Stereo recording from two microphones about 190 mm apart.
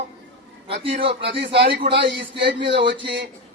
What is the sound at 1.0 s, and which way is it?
Speech, 30° right (ahead or behind).